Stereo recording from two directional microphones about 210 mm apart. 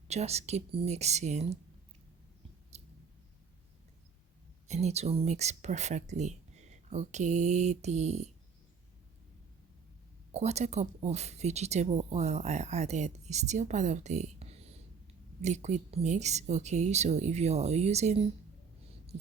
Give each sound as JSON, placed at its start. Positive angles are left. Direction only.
{"t": 0.1, "sound": "speech", "side_deg": -30}
{"t": 2.7, "sound": "clicking", "side_deg": -30}
{"t": 4.7, "sound": "speech", "side_deg": -30}
{"t": 10.3, "sound": "speech", "side_deg": -30}